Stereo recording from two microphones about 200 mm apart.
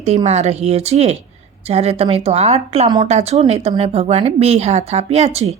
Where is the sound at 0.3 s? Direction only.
35° right (ahead or behind).